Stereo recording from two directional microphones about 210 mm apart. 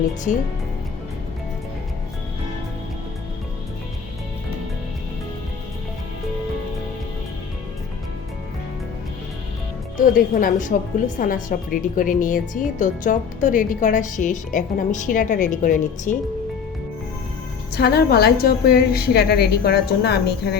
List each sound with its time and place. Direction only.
10.2 s a woman's voice: 40° left (ahead or behind)
17.7 s a woman's voice: 50° left (ahead or behind)